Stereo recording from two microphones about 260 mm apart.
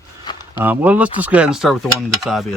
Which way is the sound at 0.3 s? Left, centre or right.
Centre.